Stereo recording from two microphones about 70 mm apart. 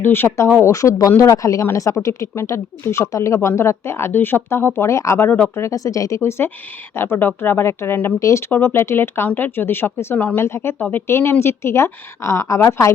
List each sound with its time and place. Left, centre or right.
0.0 s speech: left
0.6 s speech: left
5.7 s speech: left
8.2 s speech: left